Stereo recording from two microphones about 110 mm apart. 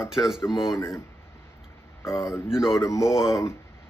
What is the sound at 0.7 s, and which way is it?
Speech, 25° left (ahead or behind).